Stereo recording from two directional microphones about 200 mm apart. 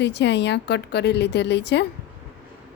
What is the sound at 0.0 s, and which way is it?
A woman's voice, 60° left (ahead or behind).